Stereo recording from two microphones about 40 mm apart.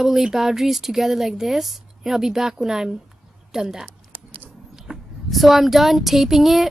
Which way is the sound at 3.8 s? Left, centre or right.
Right.